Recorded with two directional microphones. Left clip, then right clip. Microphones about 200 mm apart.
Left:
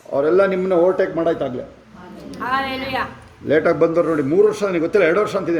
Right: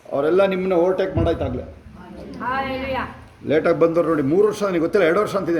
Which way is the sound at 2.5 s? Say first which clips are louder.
Left 2 dB; 40° left (ahead or behind).